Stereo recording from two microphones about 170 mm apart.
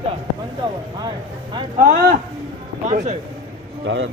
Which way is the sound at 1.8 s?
55° right (ahead or behind).